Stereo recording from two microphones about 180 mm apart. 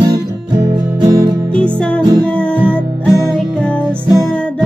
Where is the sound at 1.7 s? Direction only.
5° left (ahead or behind).